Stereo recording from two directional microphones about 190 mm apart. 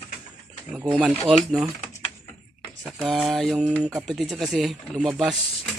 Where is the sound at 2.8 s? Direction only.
Centre (ahead or behind).